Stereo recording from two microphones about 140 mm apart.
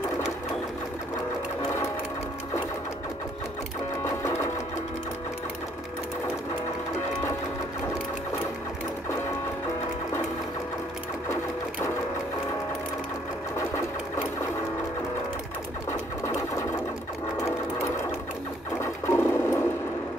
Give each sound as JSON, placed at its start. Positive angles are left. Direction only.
{"t": 4.0, "sound": "sewing machine", "side_deg": 20}
{"t": 18.8, "sound": "sewing machine", "side_deg": 20}